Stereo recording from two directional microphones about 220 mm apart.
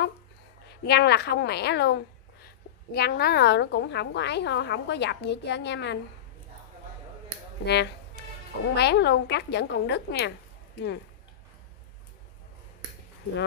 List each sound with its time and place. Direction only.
0.8 s a woman's voice: 45° left (ahead or behind)
7.6 s a woman's voice: 50° left (ahead or behind)